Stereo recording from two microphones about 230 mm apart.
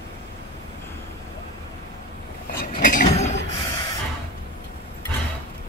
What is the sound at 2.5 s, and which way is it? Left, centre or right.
Chink, left.